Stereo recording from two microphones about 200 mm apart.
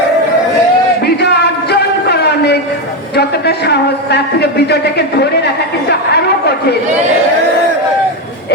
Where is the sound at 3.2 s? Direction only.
55° left (ahead or behind).